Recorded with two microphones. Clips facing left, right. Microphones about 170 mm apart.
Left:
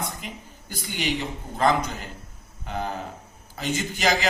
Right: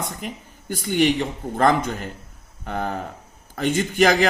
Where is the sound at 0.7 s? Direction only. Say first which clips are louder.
Right 9 dB; 45° right (ahead or behind).